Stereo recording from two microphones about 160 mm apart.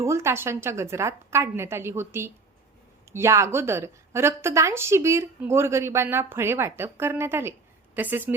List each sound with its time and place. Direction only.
0.0 s a woman's voice: 15° right (ahead or behind)